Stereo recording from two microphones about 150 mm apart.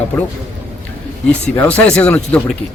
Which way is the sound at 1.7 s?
10° left (ahead or behind).